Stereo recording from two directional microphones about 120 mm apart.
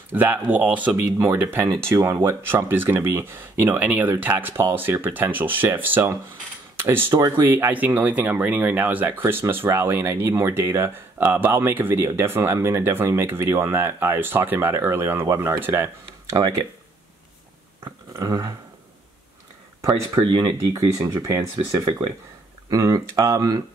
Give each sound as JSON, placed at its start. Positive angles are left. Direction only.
{"t": 0.1, "sound": "speech", "side_deg": -15}
{"t": 18.1, "sound": "speech", "side_deg": -30}
{"t": 20.2, "sound": "speech", "side_deg": -35}
{"t": 20.7, "sound": "speech", "side_deg": -25}
{"t": 22.7, "sound": "speech", "side_deg": -25}